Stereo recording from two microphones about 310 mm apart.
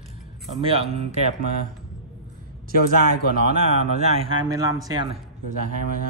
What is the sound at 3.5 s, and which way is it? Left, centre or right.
A man's voice, centre.